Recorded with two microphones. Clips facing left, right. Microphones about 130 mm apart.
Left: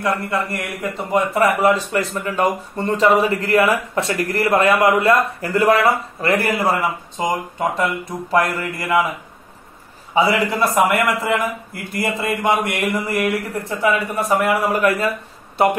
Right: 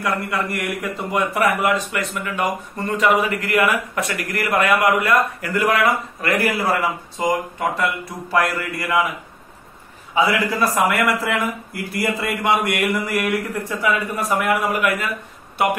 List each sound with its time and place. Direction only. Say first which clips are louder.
0.0 s a man's voice: left 2 dB; 30° left (ahead or behind)
10.1 s a man's voice: left 2 dB; 25° left (ahead or behind)